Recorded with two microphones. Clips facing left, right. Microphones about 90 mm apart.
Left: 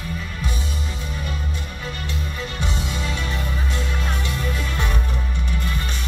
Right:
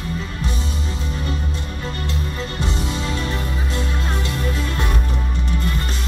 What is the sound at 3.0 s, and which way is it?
Music, 35° right (ahead or behind).